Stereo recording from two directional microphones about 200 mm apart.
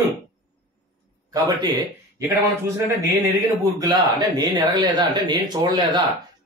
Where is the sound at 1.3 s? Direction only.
20° right (ahead or behind).